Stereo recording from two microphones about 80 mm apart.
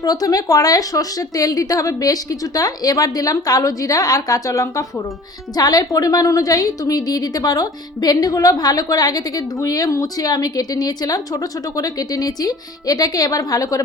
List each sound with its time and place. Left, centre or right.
0.0 s a woman's voice: left
5.5 s a woman's voice: left